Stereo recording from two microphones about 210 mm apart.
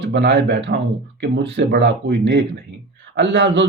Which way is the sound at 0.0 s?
55° right (ahead or behind).